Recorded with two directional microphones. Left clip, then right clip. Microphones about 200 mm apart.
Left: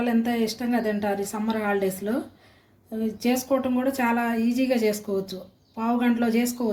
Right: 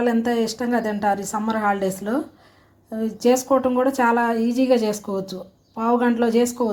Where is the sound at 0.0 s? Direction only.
30° right (ahead or behind).